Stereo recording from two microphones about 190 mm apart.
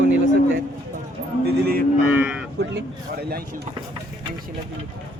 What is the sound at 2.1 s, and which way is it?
Speech, 5° right (ahead or behind).